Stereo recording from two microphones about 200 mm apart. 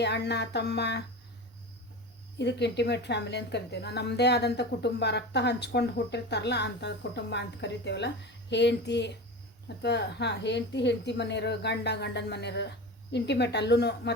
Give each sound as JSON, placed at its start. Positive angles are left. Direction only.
{"t": 0.0, "sound": "a woman's voice", "side_deg": 60}
{"t": 2.4, "sound": "a woman's voice", "side_deg": 60}